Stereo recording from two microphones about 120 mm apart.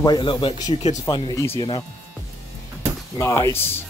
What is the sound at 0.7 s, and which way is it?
Speech, 65° left (ahead or behind).